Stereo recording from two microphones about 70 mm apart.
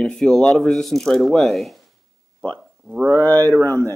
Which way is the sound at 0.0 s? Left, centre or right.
Centre.